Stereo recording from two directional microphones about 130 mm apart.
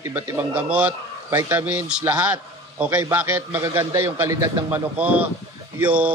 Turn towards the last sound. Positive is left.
turn(degrees=-10)  # may be behind; listen again after turning